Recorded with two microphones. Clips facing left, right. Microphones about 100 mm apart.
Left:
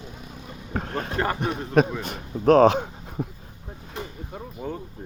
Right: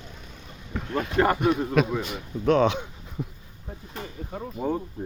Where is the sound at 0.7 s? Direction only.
45° left (ahead or behind).